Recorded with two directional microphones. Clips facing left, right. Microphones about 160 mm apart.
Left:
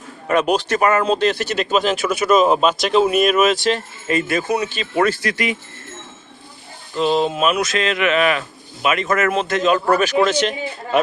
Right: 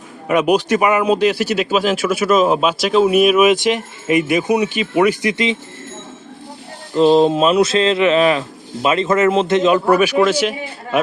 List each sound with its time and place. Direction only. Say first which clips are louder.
0.3 s speech: right 3 dB; 10° right (ahead or behind)
6.9 s speech: right 7 dB; 35° right (ahead or behind)
9.8 s speech: right 3 dB; 10° right (ahead or behind)